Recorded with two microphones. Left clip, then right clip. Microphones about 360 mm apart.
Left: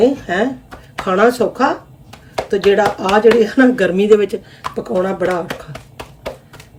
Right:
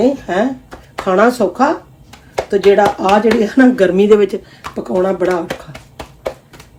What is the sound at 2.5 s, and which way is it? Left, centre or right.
Speech, centre.